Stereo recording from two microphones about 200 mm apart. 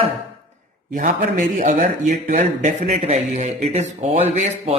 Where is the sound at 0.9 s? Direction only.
45° right (ahead or behind).